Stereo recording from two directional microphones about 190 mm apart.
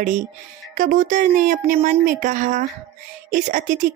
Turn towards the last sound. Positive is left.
turn(degrees=-40)  # may be behind; listen again after turning